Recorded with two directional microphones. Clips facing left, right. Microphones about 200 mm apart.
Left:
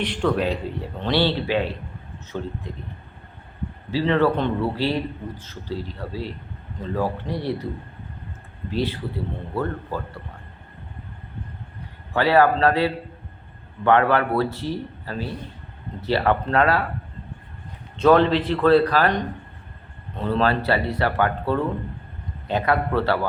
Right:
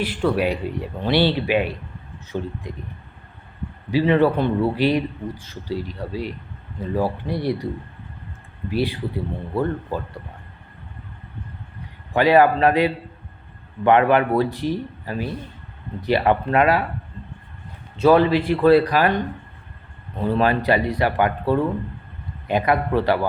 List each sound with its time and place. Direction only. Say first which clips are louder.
0.0 s a man's voice: right 1 dB; 5° right (ahead or behind)
3.9 s a man's voice: right 3 dB; 15° right (ahead or behind)
8.7 s a man's voice: right 2 dB; 15° right (ahead or behind)
12.1 s a man's voice: right 2 dB; 15° right (ahead or behind)
17.9 s a man's voice: right 1 dB; 10° right (ahead or behind)